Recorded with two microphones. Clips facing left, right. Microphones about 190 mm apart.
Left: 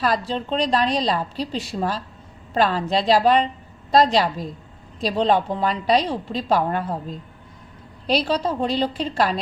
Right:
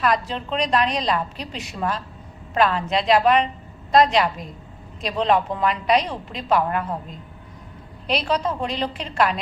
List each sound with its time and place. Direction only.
0.0 s a woman's voice: 30° left (ahead or behind)